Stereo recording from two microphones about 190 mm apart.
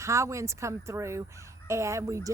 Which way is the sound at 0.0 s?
15° right (ahead or behind).